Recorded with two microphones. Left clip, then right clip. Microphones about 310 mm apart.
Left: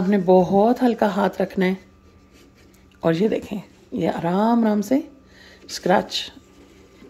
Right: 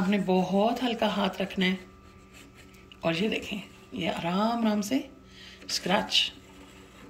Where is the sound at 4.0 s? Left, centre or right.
Centre.